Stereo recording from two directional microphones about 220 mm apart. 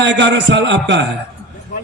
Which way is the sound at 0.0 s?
55° right (ahead or behind).